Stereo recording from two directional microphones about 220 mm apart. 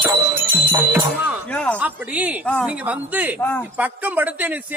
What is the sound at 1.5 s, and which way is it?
Speech, 5° left (ahead or behind).